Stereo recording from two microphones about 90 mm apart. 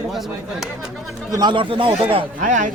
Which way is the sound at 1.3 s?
50° right (ahead or behind).